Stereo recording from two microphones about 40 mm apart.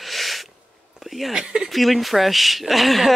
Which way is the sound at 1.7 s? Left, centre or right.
Centre.